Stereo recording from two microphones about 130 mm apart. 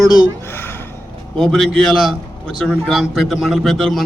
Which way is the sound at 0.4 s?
20° left (ahead or behind).